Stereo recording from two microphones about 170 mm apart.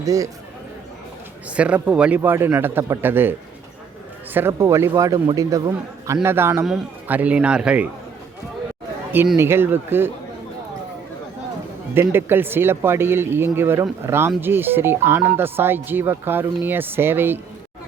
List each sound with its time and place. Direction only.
0.0 s speech: 20° right (ahead or behind)
1.5 s speech: 5° right (ahead or behind)
4.4 s a man's voice: 15° right (ahead or behind)
9.3 s speech: 15° right (ahead or behind)
11.9 s speech: 15° right (ahead or behind)